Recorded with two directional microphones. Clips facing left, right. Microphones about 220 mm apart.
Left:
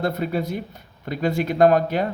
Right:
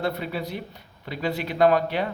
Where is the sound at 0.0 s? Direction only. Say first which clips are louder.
Left 4 dB; 45° left (ahead or behind).